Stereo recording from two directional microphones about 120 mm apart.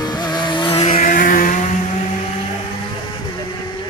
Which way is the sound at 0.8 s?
75° left (ahead or behind).